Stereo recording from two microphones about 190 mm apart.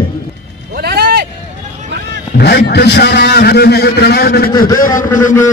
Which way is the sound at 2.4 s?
60° left (ahead or behind).